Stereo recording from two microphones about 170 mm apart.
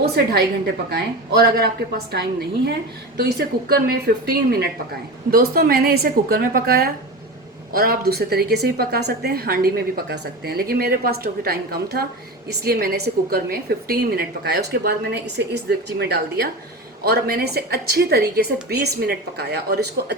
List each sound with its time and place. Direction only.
0.2 s a woman's voice: 75° right (ahead or behind)